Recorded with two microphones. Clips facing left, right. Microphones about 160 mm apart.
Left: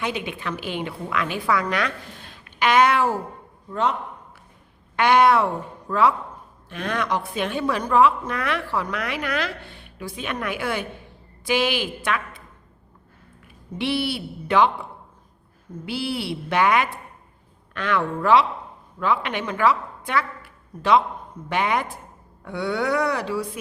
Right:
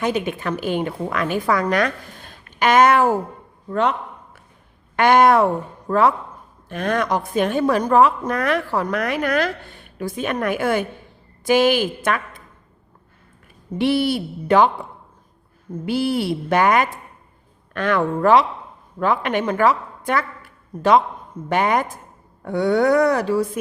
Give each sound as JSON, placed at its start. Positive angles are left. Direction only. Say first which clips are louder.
{"t": 0.0, "sound": "a woman's voice", "louder": "right 6 dB", "side_deg": -45}
{"t": 3.7, "sound": "a man's voice", "louder": "right 4 dB", "side_deg": -65}
{"t": 4.9, "sound": "a woman's voice", "louder": "right 3 dB", "side_deg": -45}
{"t": 13.7, "sound": "a woman's voice", "louder": "right 6 dB", "side_deg": -45}
{"t": 15.9, "sound": "a woman's voice", "louder": "right 7 dB", "side_deg": -45}